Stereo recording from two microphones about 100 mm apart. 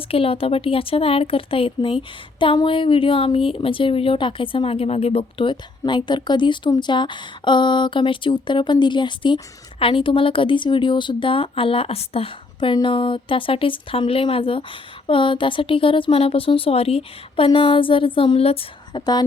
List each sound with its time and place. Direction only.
0.1 s a woman's voice: 70° left (ahead or behind)
18.9 s speech: 45° left (ahead or behind)